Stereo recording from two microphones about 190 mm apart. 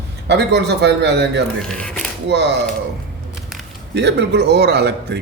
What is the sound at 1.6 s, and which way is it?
Speech, 5° left (ahead or behind).